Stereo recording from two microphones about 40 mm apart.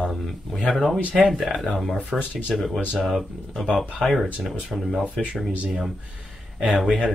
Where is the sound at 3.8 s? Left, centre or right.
Centre.